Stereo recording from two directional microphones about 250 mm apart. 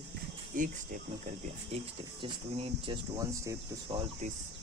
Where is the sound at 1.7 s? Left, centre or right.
Right.